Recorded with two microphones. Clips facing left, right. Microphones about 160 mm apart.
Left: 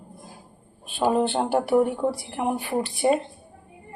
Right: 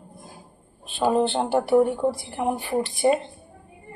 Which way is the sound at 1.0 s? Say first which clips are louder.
Right 1 dB; 10° left (ahead or behind).